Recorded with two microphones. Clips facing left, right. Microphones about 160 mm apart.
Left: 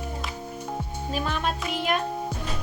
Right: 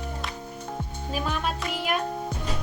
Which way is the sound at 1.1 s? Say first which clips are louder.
Left 1 dB; 10° right (ahead or behind).